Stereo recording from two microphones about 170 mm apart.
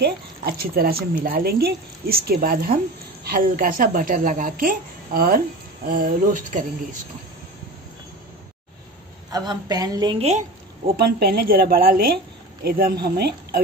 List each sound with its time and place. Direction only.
0.0 s speech: 65° right (ahead or behind); by 7.0 s 50° right (ahead or behind)
9.3 s a woman's voice: 25° right (ahead or behind)
11.0 s a woman's voice: 70° right (ahead or behind)